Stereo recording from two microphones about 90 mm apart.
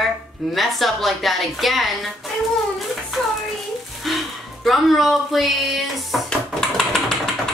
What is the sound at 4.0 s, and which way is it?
Speech, centre (ahead or behind).